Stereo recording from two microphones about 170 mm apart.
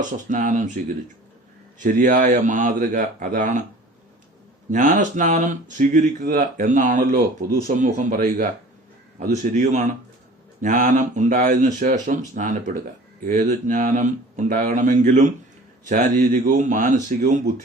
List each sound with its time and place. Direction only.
0.0 s speech: 50° right (ahead or behind)
1.8 s speech: 50° right (ahead or behind)
4.7 s speech: 50° right (ahead or behind)